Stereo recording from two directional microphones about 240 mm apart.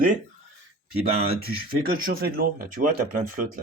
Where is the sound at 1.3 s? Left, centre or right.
Right.